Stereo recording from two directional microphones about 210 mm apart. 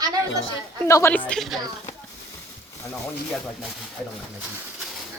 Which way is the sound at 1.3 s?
Centre (ahead or behind).